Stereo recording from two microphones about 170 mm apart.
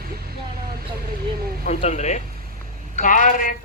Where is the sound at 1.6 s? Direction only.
40° left (ahead or behind).